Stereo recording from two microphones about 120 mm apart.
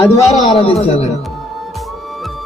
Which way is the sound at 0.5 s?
55° left (ahead or behind).